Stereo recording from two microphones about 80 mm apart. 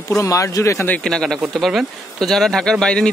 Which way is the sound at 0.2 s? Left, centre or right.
Left.